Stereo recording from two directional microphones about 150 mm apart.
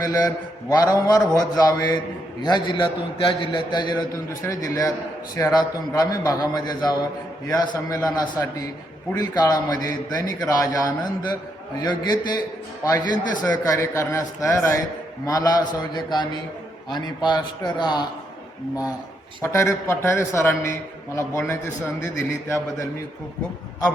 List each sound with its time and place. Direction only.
0.0 s a man's voice: 25° left (ahead or behind)
17.2 s a man's voice: 30° left (ahead or behind)
19.4 s a man's voice: 20° left (ahead or behind)